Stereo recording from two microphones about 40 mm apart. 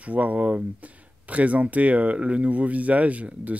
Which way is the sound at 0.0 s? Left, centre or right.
Right.